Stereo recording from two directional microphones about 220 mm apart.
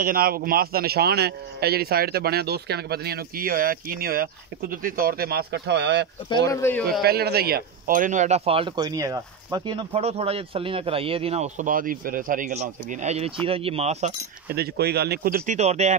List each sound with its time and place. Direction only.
0.0 s a man's voice: 40° right (ahead or behind)
6.2 s speech: 20° left (ahead or behind)
7.0 s speech: 45° right (ahead or behind); by 14.1 s 30° right (ahead or behind)
14.5 s speech: 45° right (ahead or behind); by 16.0 s 30° right (ahead or behind)